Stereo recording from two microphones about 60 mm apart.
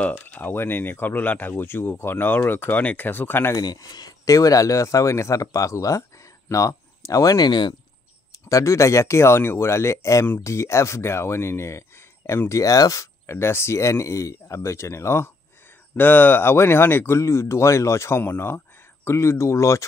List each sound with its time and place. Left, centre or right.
0.0 s speech: left
4.3 s speech: left
8.5 s speech: left
12.4 s speech: left
13.3 s speech: left
16.0 s speech: left
18.2 s speech: left
19.0 s speech: left